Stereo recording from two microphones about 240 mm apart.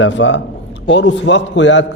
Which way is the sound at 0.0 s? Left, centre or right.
Left.